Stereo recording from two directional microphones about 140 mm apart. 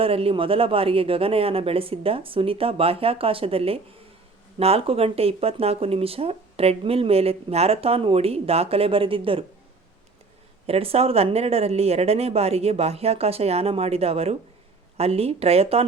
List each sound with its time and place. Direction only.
0.0 s speech: 40° right (ahead or behind)
10.7 s speech: 45° right (ahead or behind)